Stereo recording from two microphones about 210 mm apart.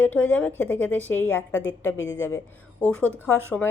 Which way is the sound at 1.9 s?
65° left (ahead or behind).